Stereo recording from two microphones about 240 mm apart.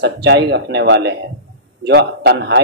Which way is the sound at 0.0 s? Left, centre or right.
Right.